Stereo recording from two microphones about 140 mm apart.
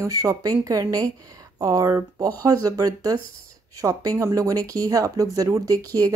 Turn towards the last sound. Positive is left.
turn(degrees=-25)  # may be behind; listen again after turning